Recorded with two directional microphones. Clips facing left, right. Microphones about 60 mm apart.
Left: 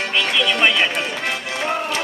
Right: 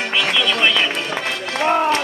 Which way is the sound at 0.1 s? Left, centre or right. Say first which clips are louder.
Right 1 dB; centre.